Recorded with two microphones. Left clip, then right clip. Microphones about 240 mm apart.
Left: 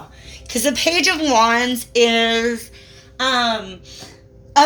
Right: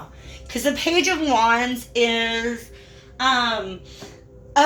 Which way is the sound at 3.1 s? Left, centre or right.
Left.